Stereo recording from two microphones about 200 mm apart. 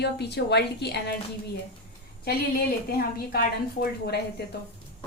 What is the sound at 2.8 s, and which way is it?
A woman's voice, 50° left (ahead or behind).